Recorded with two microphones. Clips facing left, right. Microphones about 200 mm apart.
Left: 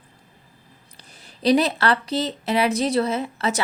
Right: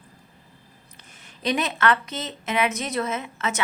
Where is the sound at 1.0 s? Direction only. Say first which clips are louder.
Left 6 dB; 35° left (ahead or behind).